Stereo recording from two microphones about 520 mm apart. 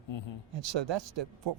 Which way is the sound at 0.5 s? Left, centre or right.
Right.